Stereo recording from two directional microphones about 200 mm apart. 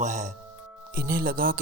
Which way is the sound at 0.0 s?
35° right (ahead or behind).